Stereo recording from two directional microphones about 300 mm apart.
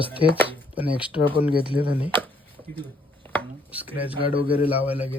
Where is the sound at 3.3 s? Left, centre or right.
Centre.